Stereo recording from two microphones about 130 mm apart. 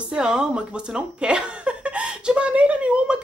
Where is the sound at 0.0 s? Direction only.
5° right (ahead or behind).